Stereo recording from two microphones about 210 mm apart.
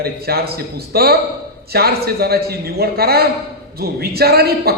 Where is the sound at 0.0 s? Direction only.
50° right (ahead or behind).